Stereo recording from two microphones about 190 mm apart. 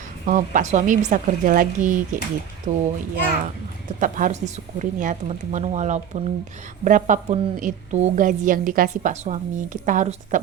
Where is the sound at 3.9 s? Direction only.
45° right (ahead or behind).